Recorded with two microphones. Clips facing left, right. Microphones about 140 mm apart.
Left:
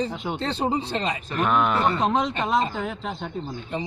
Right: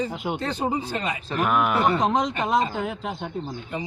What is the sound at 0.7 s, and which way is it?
Speech, 30° left (ahead or behind).